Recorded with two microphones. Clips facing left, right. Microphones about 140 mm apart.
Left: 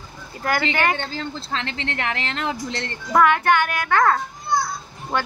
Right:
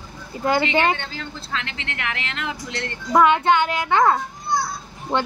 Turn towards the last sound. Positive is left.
turn(degrees=-20)  # may be behind; listen again after turning